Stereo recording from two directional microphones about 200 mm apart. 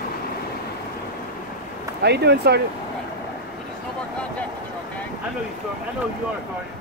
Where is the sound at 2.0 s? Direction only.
55° right (ahead or behind).